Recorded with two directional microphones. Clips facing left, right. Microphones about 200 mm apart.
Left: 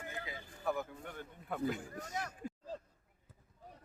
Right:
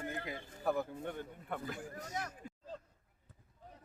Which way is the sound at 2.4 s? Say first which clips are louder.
Left 7 dB; 45° left (ahead or behind).